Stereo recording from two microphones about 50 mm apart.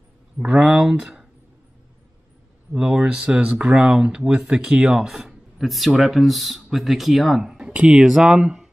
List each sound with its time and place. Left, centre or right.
0.4 s speech: centre
2.7 s speech: centre
7.5 s a sound: right
8.0 s speech: centre